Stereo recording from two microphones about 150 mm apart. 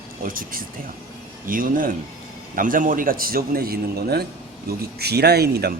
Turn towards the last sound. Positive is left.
turn(degrees=-90)